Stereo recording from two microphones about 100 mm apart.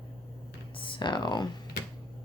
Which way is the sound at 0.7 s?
55° left (ahead or behind).